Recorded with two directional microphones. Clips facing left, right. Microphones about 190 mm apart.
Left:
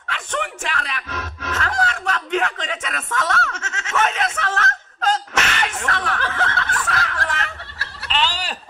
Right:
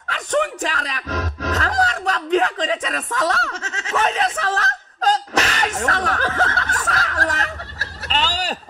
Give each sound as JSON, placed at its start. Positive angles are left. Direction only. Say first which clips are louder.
{"t": 0.1, "sound": "speech", "louder": "right 6 dB", "side_deg": -40}